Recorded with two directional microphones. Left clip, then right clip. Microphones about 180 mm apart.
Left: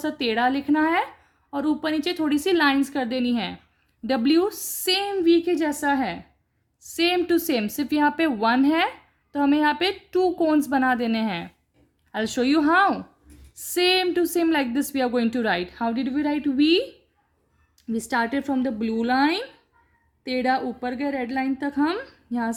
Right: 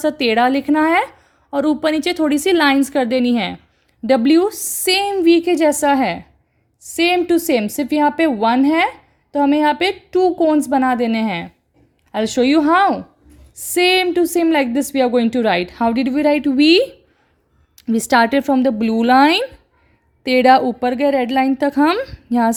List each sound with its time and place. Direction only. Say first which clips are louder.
0.0 s a woman's voice: right 8 dB; 45° right (ahead or behind)
6.8 s a woman's voice: right 6 dB; 30° right (ahead or behind)
17.7 s a woman's voice: right 11 dB; 50° right (ahead or behind)